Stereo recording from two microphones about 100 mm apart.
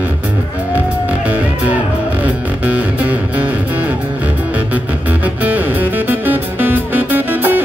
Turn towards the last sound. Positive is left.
turn(degrees=-20)  # may be behind; listen again after turning